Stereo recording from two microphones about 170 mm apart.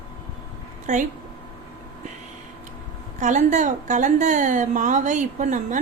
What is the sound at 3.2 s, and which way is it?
A woman's voice, 45° right (ahead or behind).